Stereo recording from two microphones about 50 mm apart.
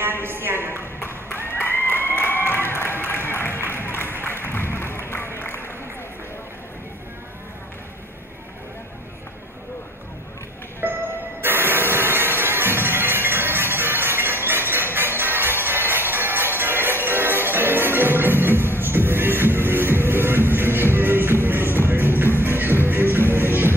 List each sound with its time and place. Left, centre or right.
0.0 s a sound: right
0.7 s ping: left
1.5 s applause: left
3.8 s music: left
4.2 s applause: left
10.8 s music: right